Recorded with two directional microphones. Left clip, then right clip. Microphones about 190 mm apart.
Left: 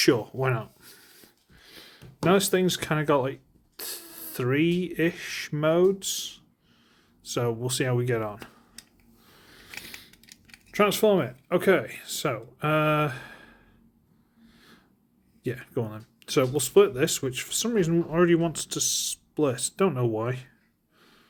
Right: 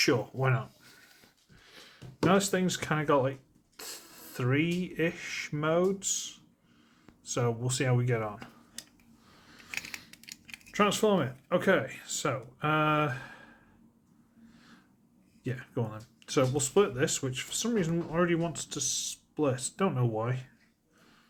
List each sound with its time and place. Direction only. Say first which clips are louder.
0.0 s a sound: left 4 dB; 45° left (ahead or behind)
3.8 s speech: left 5 dB; 45° left (ahead or behind)
9.3 s a sound: left 3 dB; 45° left (ahead or behind)
10.7 s speech: left 5 dB; 45° left (ahead or behind)
14.5 s snort: left 4 dB; 45° left (ahead or behind)
15.4 s speech: left 5 dB; 45° left (ahead or behind)